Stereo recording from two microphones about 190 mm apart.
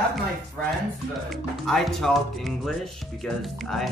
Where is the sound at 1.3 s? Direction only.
Centre (ahead or behind).